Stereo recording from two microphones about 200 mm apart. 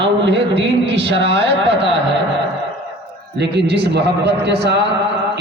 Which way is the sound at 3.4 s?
55° right (ahead or behind).